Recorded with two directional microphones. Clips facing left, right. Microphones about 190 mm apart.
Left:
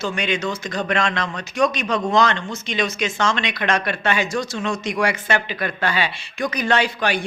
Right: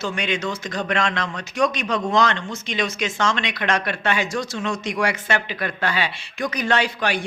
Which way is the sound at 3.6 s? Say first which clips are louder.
Left 1 dB; 30° left (ahead or behind).